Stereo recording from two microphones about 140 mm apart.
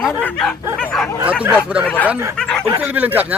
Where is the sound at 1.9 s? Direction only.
10° left (ahead or behind).